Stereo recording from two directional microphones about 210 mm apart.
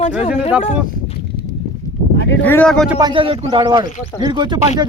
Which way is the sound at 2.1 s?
55° left (ahead or behind).